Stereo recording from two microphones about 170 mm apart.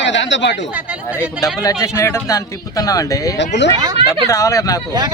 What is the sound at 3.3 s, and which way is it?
Speech, 90° left.